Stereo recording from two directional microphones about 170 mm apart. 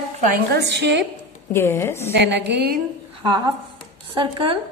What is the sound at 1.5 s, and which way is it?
Speech, 15° left (ahead or behind).